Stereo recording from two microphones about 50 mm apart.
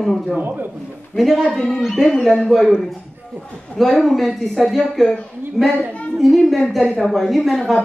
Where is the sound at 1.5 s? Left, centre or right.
Centre.